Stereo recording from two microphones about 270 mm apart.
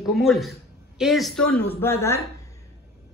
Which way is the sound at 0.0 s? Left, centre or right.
Centre.